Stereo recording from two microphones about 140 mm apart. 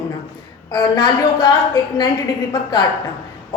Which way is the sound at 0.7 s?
30° left (ahead or behind).